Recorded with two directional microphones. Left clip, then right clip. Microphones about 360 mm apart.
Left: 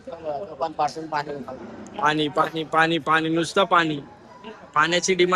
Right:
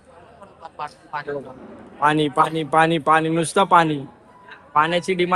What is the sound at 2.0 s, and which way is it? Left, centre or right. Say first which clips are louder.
Speech: right 4 dB; centre.